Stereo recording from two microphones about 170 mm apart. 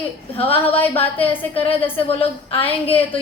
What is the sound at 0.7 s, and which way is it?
Speech, 10° left (ahead or behind).